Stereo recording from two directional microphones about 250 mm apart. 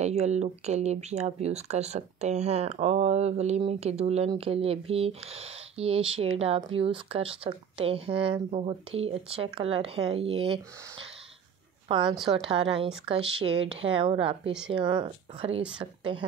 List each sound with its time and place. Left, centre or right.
0.0 s speech: right